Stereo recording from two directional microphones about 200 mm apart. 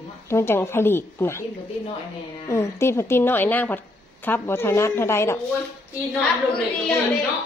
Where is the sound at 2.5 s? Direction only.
15° left (ahead or behind).